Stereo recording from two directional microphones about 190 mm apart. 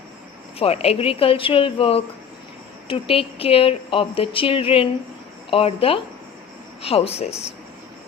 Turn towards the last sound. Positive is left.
turn(degrees=35)  # may be behind; listen again after turning